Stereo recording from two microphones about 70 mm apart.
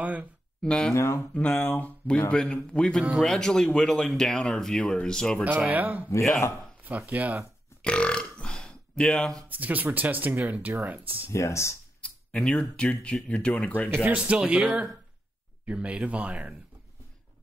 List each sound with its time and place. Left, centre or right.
0.0 s speech: right
0.6 s speech: centre
0.9 s speech: left
1.3 s speech: left; by 5.4 s centre
5.7 s speech: right
7.1 s speech: right
7.8 s burping: centre
9.5 s speech: right
11.3 s speech: left
12.0 s speech: centre
14.0 s speech: centre
15.6 s speech: centre